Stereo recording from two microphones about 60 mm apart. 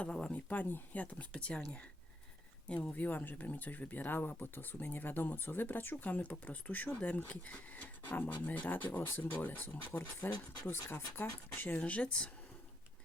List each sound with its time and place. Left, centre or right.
0.0 s speech: centre
2.6 s speech: left
11.8 s speech: left